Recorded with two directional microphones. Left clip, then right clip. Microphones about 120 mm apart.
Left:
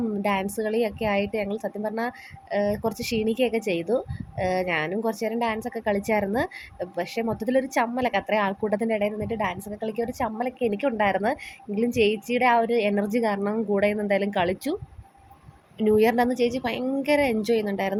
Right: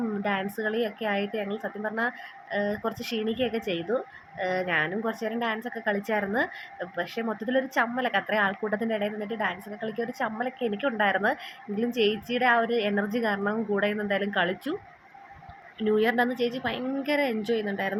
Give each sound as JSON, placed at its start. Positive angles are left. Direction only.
{"t": 0.2, "sound": "a woman's voice", "side_deg": 40}
{"t": 15.9, "sound": "a woman's voice", "side_deg": 45}